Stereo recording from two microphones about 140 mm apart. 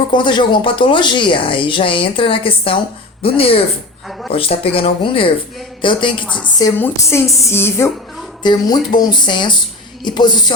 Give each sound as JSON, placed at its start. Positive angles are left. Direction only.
{"t": 0.1, "sound": "speech", "side_deg": 35}
{"t": 6.2, "sound": "a woman's voice", "side_deg": 10}
{"t": 8.4, "sound": "speech", "side_deg": 30}